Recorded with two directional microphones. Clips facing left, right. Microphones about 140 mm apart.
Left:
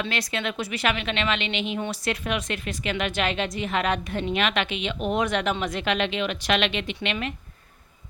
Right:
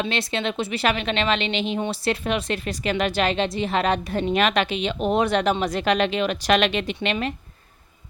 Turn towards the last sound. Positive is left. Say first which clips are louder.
# right 4 dB
turn(degrees=-35)  # may be behind; listen again after turning